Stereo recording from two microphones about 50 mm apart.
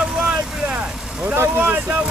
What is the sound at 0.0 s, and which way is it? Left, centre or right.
Vehicle, right.